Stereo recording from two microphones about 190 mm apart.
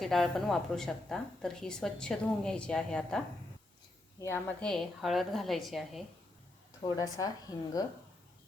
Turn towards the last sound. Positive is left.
turn(degrees=20)  # may be behind; listen again after turning